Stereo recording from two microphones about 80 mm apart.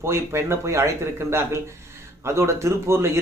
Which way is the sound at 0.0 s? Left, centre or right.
Right.